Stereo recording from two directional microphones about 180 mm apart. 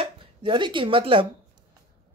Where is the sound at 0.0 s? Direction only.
30° right (ahead or behind).